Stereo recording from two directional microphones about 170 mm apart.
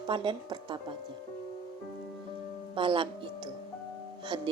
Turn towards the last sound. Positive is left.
turn(degrees=-30)  # may be behind; listen again after turning